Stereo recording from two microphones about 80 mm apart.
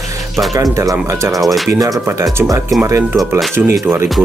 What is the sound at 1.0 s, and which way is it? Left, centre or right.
Speech, right.